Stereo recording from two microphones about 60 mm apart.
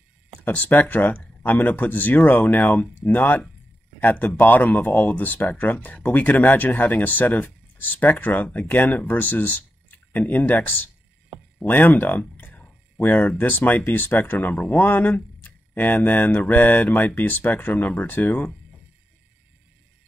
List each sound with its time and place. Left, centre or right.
0.5 s speech: left